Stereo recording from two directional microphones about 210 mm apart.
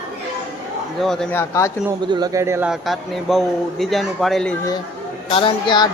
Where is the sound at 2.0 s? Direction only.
20° right (ahead or behind); by 4.5 s centre (ahead or behind).